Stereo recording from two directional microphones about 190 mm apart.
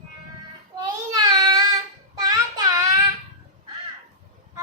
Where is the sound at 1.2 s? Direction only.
20° right (ahead or behind).